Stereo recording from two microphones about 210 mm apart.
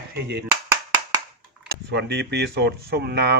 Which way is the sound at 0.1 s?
50° right (ahead or behind).